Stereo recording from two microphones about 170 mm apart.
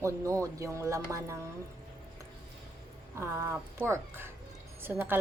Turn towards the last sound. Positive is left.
turn(degrees=-10)  # may be behind; listen again after turning